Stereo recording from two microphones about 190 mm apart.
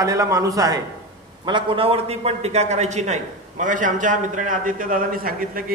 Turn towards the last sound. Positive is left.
turn(degrees=-50)  # may be behind; listen again after turning